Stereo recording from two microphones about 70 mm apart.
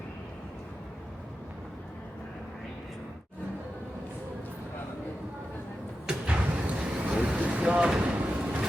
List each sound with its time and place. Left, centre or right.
6.1 s vehicle: centre